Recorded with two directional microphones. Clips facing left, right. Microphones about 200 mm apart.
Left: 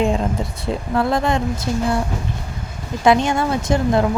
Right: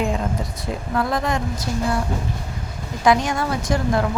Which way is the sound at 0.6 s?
25° left (ahead or behind).